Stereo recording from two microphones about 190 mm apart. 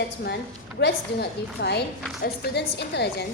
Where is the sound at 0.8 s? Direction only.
60° left (ahead or behind).